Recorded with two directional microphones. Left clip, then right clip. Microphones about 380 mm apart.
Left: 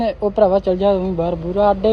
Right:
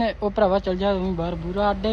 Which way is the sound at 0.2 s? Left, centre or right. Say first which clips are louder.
Left 8 dB; centre.